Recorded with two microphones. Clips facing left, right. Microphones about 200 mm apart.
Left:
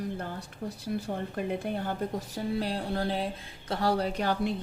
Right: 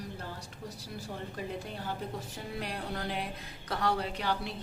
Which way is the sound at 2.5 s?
30° left (ahead or behind).